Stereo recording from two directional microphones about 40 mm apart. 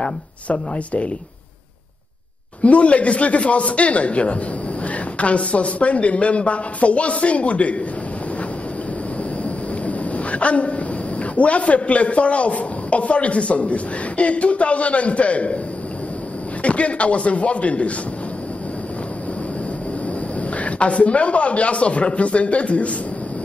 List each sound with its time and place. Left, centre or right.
0.5 s a man's voice: left
2.6 s a man's voice: left
9.4 s a sound: left
11.3 s a man's voice: left
16.6 s a man's voice: left
20.5 s a man's voice: left